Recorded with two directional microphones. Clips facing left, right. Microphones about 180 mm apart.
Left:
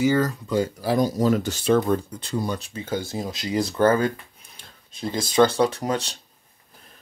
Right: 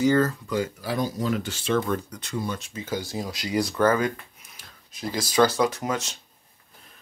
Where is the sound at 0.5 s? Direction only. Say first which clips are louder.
Left 4 dB; 35° left (ahead or behind).